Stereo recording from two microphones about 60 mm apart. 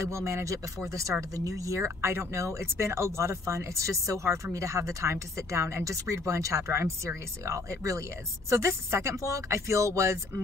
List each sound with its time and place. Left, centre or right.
0.0 s speech: right
1.3 s speech: right